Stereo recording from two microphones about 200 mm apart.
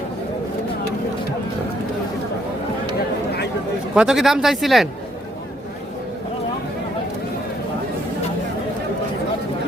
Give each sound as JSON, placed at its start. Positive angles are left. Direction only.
{"t": 3.9, "sound": "speech", "side_deg": -5}